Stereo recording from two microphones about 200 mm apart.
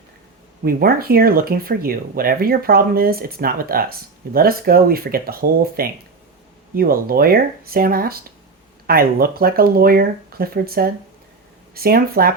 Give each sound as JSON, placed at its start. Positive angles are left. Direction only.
{"t": 0.6, "sound": "speech", "side_deg": -50}